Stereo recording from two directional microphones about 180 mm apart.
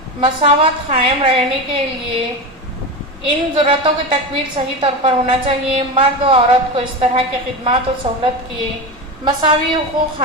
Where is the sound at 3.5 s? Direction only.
30° right (ahead or behind).